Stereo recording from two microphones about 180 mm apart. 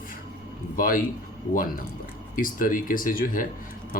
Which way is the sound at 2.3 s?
50° left (ahead or behind).